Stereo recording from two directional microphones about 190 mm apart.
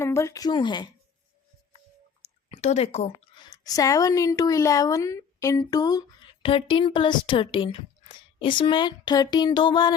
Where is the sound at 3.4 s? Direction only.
20° left (ahead or behind).